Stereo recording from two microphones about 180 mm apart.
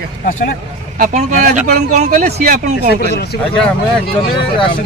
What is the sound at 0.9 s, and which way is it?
Speech, 45° right (ahead or behind).